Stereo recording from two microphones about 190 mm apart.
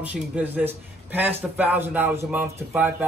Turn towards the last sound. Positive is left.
turn(degrees=-10)  # may be behind; listen again after turning